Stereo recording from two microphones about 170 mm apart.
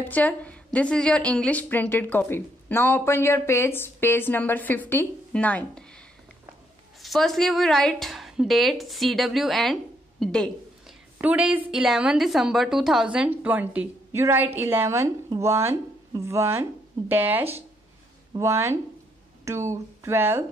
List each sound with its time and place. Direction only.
0.0 s a woman's voice: 10° left (ahead or behind)
7.0 s a woman's voice: centre (ahead or behind)
11.1 s a woman's voice: 10° right (ahead or behind)